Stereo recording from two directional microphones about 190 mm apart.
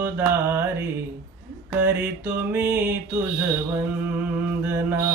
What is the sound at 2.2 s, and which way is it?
Music, 10° right (ahead or behind).